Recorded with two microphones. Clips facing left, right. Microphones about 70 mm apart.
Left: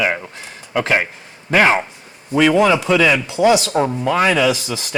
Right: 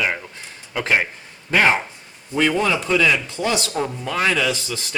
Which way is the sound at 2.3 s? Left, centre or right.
Left.